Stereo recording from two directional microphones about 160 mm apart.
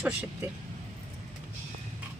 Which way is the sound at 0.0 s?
10° right (ahead or behind).